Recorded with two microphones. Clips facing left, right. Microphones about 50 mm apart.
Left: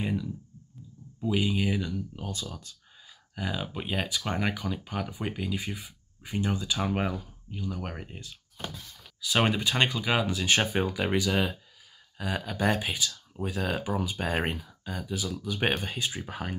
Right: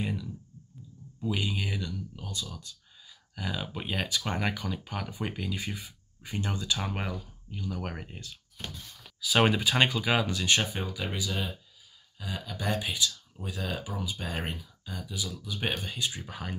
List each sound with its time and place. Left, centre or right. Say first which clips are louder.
0.0 s speech: left 3 dB; centre
2.1 s speech: left 2 dB; left
3.3 s speech: left 2 dB; centre
10.4 s speech: left 2 dB; left
10.7 s speech: left 7 dB; left
11.1 s speech: left 8 dB; left
12.2 s speech: left 7 dB; left